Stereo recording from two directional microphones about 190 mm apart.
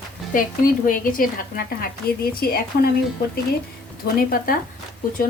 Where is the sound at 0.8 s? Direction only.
45° left (ahead or behind).